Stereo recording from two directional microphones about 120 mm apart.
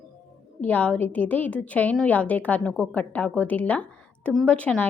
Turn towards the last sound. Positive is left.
turn(degrees=10)  # may be behind; listen again after turning